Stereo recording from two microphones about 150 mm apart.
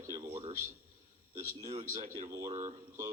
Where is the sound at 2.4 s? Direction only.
50° right (ahead or behind).